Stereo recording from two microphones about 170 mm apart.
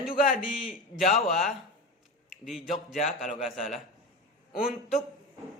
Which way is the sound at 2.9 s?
45° left (ahead or behind).